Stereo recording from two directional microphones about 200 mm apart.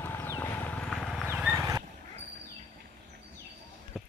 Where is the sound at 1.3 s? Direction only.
5° right (ahead or behind).